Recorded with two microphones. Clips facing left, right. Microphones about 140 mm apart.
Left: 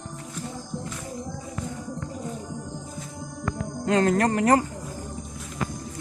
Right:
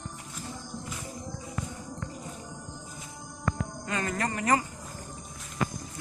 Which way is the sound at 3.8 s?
70° left (ahead or behind).